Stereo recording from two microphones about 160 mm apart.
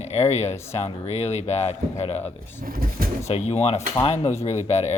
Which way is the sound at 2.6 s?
65° right (ahead or behind).